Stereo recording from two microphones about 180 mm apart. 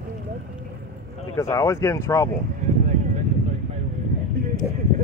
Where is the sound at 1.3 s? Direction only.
15° left (ahead or behind).